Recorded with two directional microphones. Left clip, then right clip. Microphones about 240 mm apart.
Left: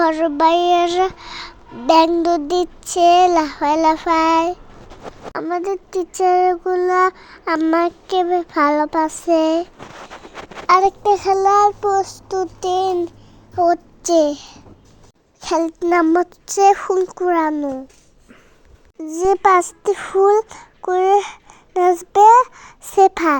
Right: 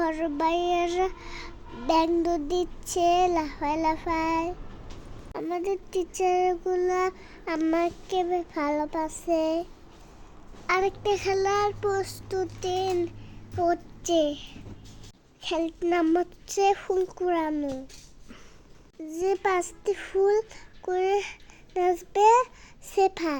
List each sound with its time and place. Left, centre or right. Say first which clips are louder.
0.0 s child singing: left 12 dB; centre
5.5 s a child's voice: left 7 dB; centre
10.7 s a child's voice: left 12 dB; left
13.6 s child singing: left 10 dB; left
15.4 s a child's voice: left 10 dB; left
19.0 s a child's voice: left 12 dB; left